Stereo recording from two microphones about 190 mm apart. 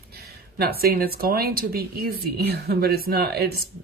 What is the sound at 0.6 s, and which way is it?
Speech, 55° right (ahead or behind).